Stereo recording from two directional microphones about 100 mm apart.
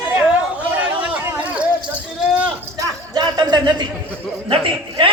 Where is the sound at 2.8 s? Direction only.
45° right (ahead or behind).